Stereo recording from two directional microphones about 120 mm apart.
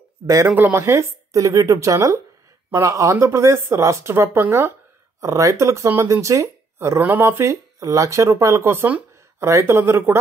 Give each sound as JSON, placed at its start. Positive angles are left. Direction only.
{"t": 0.6, "sound": "speech", "side_deg": -20}